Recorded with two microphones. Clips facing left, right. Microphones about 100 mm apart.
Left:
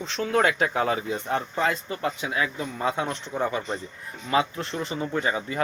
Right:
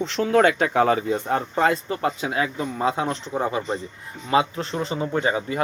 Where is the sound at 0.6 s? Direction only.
45° right (ahead or behind); by 5.2 s 25° right (ahead or behind).